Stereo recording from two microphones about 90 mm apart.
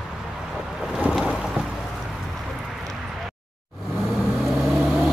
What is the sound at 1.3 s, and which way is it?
Boat, 5° right (ahead or behind).